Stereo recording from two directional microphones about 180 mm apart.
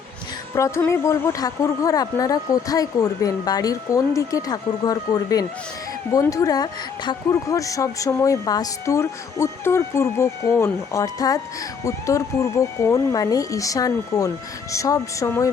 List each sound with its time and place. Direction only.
0.5 s speech: 15° left (ahead or behind)